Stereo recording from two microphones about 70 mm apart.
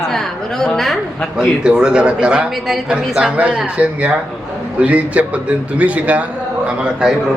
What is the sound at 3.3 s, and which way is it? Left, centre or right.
Speech, centre.